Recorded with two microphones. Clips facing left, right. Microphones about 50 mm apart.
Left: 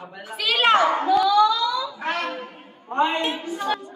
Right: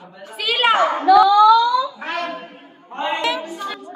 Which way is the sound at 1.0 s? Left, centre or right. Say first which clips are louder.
Right 7 dB; right.